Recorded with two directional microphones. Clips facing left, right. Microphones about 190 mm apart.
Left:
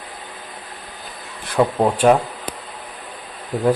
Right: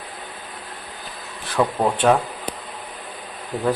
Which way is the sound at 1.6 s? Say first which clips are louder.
Left 3 dB; 15° left (ahead or behind).